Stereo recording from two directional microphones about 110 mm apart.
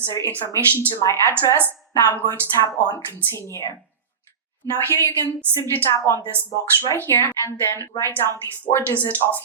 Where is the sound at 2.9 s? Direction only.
20° left (ahead or behind).